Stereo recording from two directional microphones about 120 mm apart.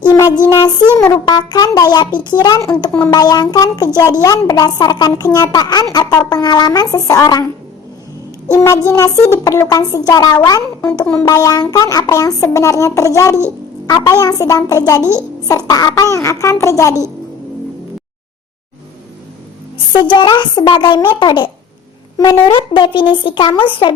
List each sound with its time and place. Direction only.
0.0 s music: 30° left (ahead or behind)
1.3 s a child's voice: 35° left (ahead or behind)
8.5 s a child's voice: 25° left (ahead or behind)
10.8 s speech: 10° left (ahead or behind)
11.2 s a child's voice: 30° left (ahead or behind)
19.9 s a child's voice: 40° left (ahead or behind)